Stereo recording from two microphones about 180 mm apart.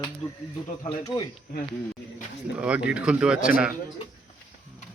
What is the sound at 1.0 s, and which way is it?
Speech, 20° left (ahead or behind).